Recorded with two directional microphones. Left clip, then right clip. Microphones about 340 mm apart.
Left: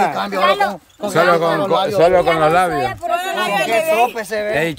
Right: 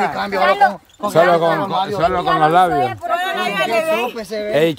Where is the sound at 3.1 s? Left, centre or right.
Left.